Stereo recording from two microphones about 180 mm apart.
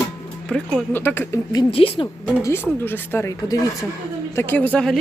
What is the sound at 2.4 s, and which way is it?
Speech, 15° left (ahead or behind).